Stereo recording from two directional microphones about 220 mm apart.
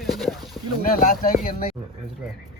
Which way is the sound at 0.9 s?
40° left (ahead or behind).